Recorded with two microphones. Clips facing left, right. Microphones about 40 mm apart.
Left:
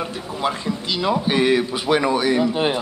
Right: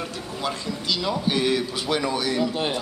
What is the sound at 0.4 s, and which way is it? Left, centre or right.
A man's voice, left.